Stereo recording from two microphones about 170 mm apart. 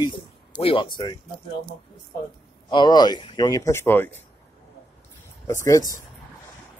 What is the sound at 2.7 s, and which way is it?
Speech, 25° left (ahead or behind).